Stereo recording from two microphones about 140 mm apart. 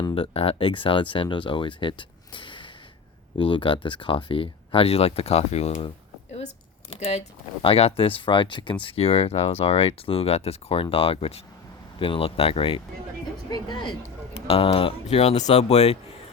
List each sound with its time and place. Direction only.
0.1 s speech: 40° left (ahead or behind)
6.9 s speech: 50° left (ahead or behind); by 13.9 s 30° left (ahead or behind)
14.3 s speech: 45° left (ahead or behind)